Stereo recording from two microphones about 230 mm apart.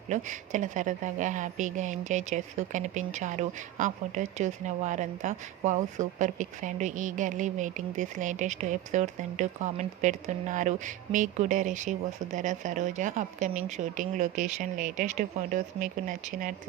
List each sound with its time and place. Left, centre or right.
0.1 s a woman's voice: right